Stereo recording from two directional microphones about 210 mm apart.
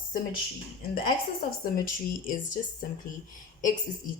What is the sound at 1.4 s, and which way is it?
A woman's voice, 45° left (ahead or behind).